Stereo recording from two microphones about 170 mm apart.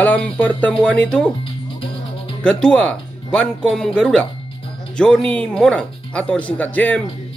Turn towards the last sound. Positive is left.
turn(degrees=10)  # may be behind; listen again after turning